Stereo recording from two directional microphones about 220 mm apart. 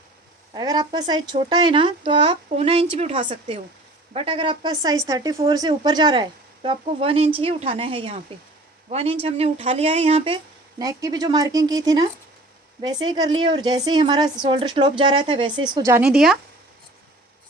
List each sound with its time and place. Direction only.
0.5 s a woman's voice: 20° right (ahead or behind); by 16.4 s centre (ahead or behind)